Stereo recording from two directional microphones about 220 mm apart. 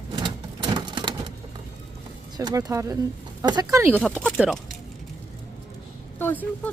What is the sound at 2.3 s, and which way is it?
Speech, 15° right (ahead or behind).